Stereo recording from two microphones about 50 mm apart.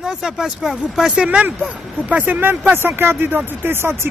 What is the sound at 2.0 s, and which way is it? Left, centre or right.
Speech, right.